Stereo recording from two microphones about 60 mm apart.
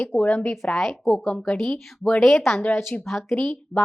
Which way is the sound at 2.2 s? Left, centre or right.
Centre.